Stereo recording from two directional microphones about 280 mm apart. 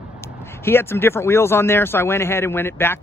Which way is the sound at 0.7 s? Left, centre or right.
Centre.